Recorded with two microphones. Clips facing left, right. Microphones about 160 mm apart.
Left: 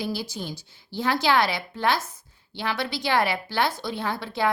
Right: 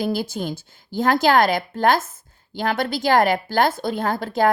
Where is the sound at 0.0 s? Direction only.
50° right (ahead or behind).